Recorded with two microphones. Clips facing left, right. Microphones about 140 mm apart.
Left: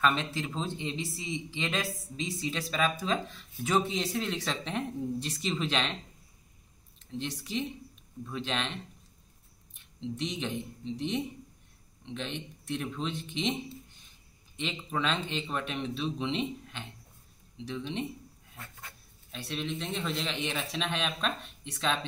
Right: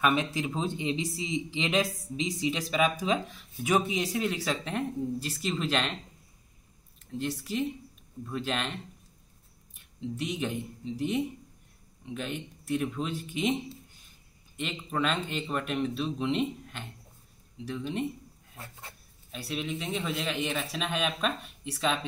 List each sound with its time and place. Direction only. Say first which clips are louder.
0.0 s speech: right 2 dB; 15° right (ahead or behind)
7.1 s a man's voice: right 3 dB; 5° right (ahead or behind)
9.9 s a man's voice: right 2 dB; 5° right (ahead or behind)
18.6 s speech: right 2 dB; 30° right (ahead or behind)
19.3 s a man's voice: right 1 dB; 5° right (ahead or behind)